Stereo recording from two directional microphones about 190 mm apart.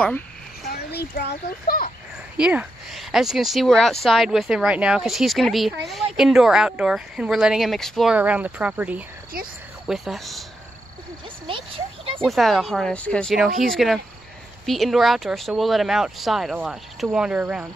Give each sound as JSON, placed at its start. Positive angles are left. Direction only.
{"t": 0.7, "sound": "a child's voice", "side_deg": 55}
{"t": 2.3, "sound": "speech", "side_deg": -5}
{"t": 11.4, "sound": "a sound", "side_deg": -30}
{"t": 12.2, "sound": "speech", "side_deg": 0}